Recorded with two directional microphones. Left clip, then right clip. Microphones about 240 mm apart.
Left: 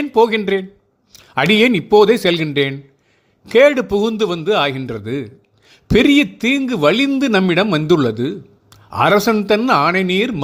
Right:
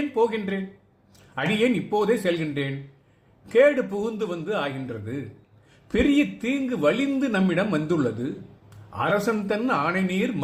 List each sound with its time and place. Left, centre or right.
0.1 s a man's voice: left